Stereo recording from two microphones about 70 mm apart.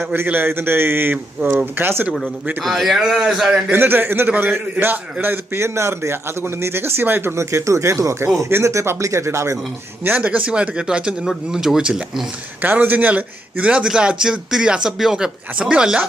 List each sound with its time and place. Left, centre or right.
0.0 s a man's voice: right
2.6 s a man's voice: centre
3.7 s a man's voice: right
10.2 s a man's voice: centre